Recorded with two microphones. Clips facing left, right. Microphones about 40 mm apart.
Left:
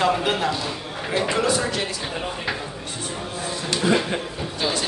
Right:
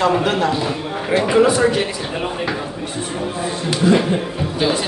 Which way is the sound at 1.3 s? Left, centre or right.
Right.